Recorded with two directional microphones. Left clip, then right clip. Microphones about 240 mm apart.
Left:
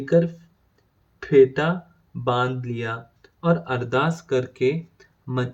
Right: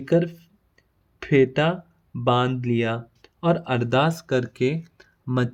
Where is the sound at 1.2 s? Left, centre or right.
Right.